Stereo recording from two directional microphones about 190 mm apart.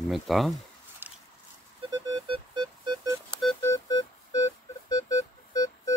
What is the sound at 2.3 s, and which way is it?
Music, 25° right (ahead or behind).